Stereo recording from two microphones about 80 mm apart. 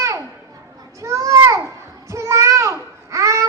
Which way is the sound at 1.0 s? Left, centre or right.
Right.